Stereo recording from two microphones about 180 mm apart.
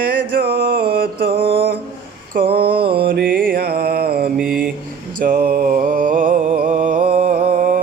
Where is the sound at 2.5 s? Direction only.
60° right (ahead or behind).